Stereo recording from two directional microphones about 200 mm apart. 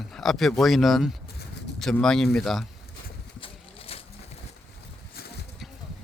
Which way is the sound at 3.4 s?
30° left (ahead or behind).